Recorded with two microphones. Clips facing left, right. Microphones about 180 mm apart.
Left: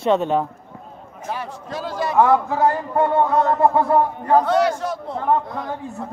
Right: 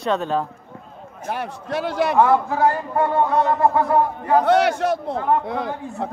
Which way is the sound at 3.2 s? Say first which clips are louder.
Left 1 dB; centre (ahead or behind).